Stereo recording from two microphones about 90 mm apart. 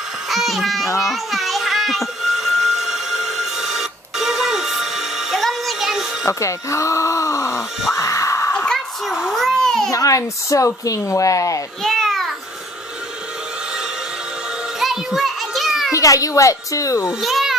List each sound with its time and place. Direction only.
0.3 s music: centre (ahead or behind)
0.8 s speech: 35° left (ahead or behind)
1.1 s a sound: centre (ahead or behind)
6.2 s groan: 35° left (ahead or behind)
8.0 s a sound: 35° left (ahead or behind)
8.5 s children playing: 5° left (ahead or behind)
9.8 s speech: 40° left (ahead or behind)
11.8 s babbling: 5° left (ahead or behind)
14.8 s children playing: 5° right (ahead or behind)
15.9 s speech: 40° left (ahead or behind)
17.2 s a child's voice: centre (ahead or behind)